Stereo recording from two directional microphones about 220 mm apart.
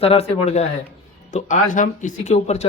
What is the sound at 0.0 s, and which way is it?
Speech, 25° left (ahead or behind).